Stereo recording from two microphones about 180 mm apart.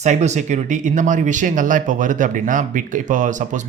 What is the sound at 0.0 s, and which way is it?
Speech, 40° right (ahead or behind).